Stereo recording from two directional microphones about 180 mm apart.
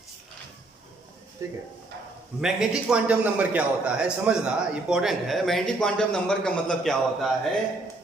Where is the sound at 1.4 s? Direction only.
15° right (ahead or behind).